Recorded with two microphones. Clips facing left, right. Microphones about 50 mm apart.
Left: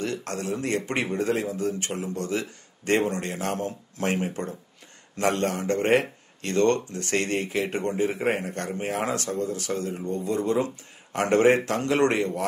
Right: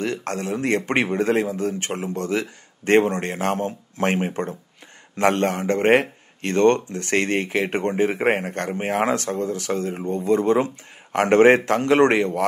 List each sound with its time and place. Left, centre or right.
0.0 s speech: right